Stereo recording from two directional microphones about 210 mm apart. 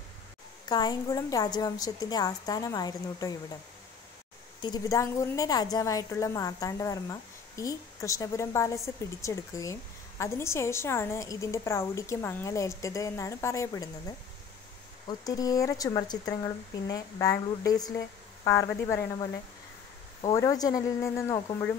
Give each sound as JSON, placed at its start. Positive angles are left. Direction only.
{"t": 0.7, "sound": "a woman's voice", "side_deg": 20}
{"t": 4.6, "sound": "a woman's voice", "side_deg": 20}
{"t": 20.2, "sound": "a woman's voice", "side_deg": 20}